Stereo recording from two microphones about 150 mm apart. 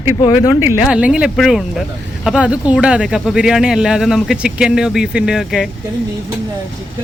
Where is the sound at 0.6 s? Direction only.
10° right (ahead or behind).